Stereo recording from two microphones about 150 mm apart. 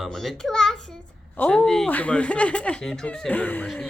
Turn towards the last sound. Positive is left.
turn(degrees=10)  # may be behind; listen again after turning